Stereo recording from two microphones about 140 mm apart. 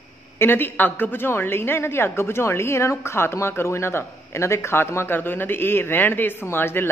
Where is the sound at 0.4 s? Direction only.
15° left (ahead or behind).